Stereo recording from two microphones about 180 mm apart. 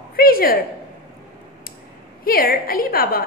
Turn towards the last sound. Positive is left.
turn(degrees=55)  # may be behind; listen again after turning